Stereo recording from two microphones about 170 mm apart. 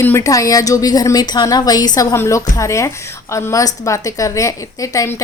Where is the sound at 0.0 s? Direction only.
15° left (ahead or behind).